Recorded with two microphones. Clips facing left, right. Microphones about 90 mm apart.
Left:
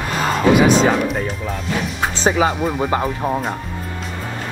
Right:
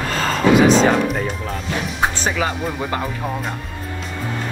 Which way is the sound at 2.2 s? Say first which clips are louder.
Left 5 dB; 35° left (ahead or behind).